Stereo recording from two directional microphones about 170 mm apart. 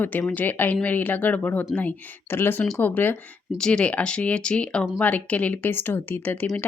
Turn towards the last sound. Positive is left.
turn(degrees=10)  # may be behind; listen again after turning